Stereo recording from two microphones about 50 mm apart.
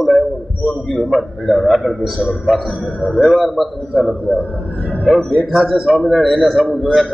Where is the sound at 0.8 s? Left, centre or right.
Centre.